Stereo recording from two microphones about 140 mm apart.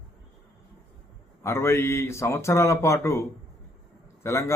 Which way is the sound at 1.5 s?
20° left (ahead or behind).